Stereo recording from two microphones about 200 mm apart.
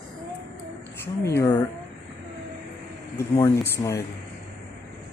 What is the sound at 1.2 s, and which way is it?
Speech, 15° left (ahead or behind).